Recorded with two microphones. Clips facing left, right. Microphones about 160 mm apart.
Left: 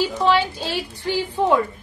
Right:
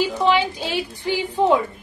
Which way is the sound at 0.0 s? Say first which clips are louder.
Even; 15° right (ahead or behind).